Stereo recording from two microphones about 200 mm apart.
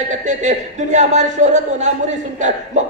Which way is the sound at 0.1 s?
35° right (ahead or behind).